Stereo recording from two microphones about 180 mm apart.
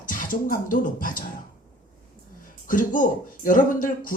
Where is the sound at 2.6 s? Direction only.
50° left (ahead or behind).